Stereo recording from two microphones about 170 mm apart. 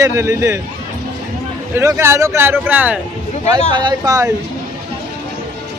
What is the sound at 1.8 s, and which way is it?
Speech, 15° right (ahead or behind).